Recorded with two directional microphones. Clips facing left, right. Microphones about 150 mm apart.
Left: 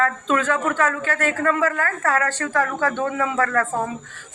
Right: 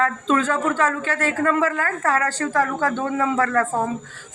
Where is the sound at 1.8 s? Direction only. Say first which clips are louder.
Even; 20° right (ahead or behind).